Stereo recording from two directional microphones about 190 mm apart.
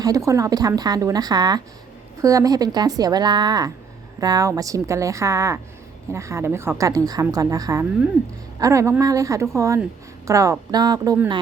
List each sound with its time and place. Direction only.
0.0 s a woman's voice: 15° right (ahead or behind)